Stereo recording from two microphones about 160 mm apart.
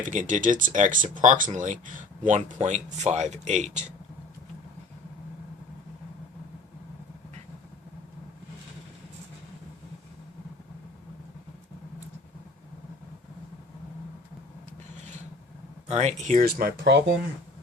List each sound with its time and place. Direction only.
0.0 s speech: 55° right (ahead or behind)
15.9 s speech: 45° right (ahead or behind); by 17.0 s 80° right